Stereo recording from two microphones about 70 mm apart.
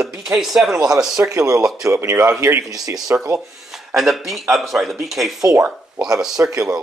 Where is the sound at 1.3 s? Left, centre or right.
Right.